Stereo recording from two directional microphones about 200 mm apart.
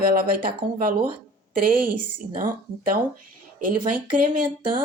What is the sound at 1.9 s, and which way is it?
A woman's voice, 45° right (ahead or behind).